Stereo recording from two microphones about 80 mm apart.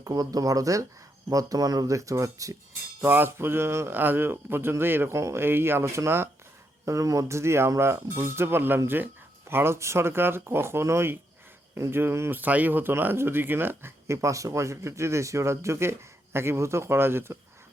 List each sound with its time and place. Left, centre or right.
0.0 s speech: right
3.0 s a man's voice: right
12.4 s speech: right